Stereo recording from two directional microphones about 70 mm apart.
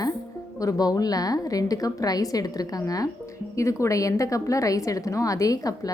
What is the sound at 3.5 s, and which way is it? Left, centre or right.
A woman's voice, left.